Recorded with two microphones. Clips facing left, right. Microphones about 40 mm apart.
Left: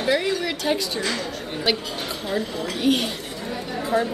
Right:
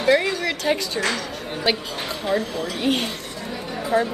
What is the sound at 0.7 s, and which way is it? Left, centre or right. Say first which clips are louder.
Speech: right 1 dB; centre.